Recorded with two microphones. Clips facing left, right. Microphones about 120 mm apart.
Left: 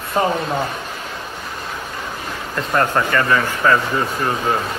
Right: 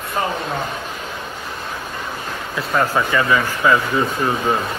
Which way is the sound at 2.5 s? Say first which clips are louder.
Left 1 dB; 5° right (ahead or behind).